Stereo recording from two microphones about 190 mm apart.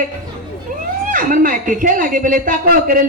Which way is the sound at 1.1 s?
45° right (ahead or behind).